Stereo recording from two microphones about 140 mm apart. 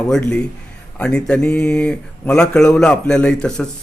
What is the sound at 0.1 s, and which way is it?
Speech, 10° left (ahead or behind).